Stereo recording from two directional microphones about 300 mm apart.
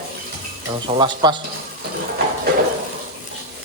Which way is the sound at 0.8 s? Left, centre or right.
Centre.